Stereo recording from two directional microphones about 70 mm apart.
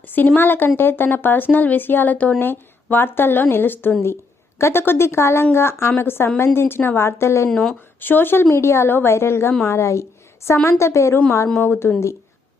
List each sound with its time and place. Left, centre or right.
0.1 s a woman's voice: left
7.5 s speech: centre
8.0 s a woman's voice: left
11.6 s a woman's voice: left